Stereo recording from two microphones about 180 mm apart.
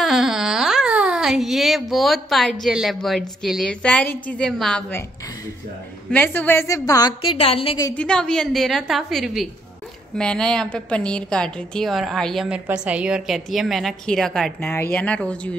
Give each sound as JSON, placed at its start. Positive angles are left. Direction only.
{"t": 0.0, "sound": "a sound", "side_deg": 0}
{"t": 2.6, "sound": "a woman's voice", "side_deg": 0}
{"t": 6.1, "sound": "a woman's voice", "side_deg": 10}
{"t": 7.8, "sound": "a woman's voice", "side_deg": 5}